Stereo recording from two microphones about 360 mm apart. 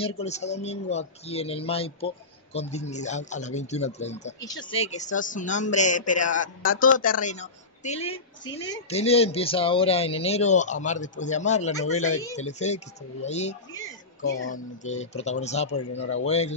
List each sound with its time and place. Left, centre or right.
0.2 s a man's voice: centre
15.7 s speech: left
16.3 s speech: centre